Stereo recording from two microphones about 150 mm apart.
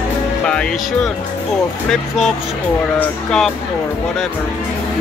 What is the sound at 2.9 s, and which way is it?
Speech, 5° left (ahead or behind).